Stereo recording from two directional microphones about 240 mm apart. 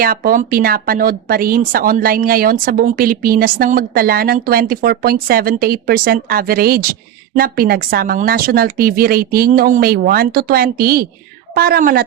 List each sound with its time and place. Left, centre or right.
0.0 s speech: right